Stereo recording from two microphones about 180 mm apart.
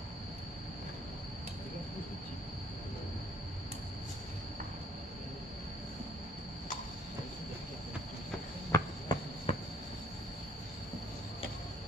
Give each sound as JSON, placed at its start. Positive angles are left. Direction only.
{"t": 8.7, "sound": "cricket", "side_deg": 15}
{"t": 9.1, "sound": "insect", "side_deg": 25}
{"t": 9.5, "sound": "a sound", "side_deg": 30}